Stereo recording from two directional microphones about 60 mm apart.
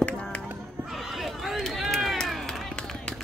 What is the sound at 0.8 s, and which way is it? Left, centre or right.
Run, centre.